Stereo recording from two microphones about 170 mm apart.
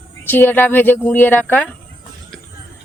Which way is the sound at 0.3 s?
10° left (ahead or behind).